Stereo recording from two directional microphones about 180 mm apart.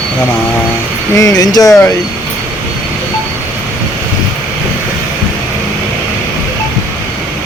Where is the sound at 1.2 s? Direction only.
20° left (ahead or behind).